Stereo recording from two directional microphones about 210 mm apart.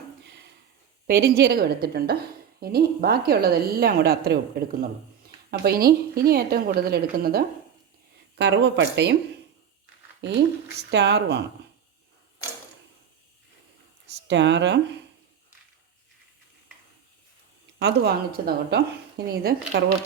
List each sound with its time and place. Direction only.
1.0 s a woman's voice: 50° right (ahead or behind)
5.5 s a woman's voice: 45° right (ahead or behind)
10.2 s a woman's voice: 55° right (ahead or behind)
14.3 s speech: 55° right (ahead or behind)
17.7 s a woman's voice: 50° right (ahead or behind)